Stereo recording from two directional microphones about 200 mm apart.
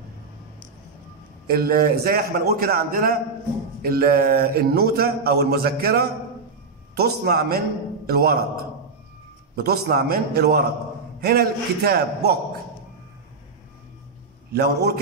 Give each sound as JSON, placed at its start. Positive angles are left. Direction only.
{"t": 1.5, "sound": "speech", "side_deg": -50}
{"t": 9.6, "sound": "speech", "side_deg": -50}
{"t": 14.5, "sound": "a man's voice", "side_deg": -55}